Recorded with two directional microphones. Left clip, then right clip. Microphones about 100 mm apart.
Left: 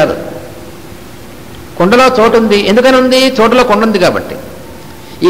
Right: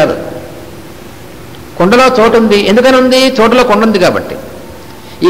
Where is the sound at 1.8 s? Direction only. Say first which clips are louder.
Even; 25° left (ahead or behind).